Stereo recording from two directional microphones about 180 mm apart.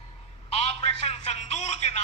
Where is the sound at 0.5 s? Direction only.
35° left (ahead or behind).